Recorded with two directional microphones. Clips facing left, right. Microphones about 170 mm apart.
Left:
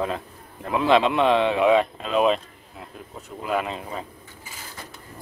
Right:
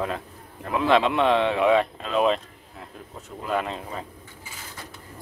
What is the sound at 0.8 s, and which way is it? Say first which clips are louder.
Speech: left 1 dB; 20° left (ahead or behind).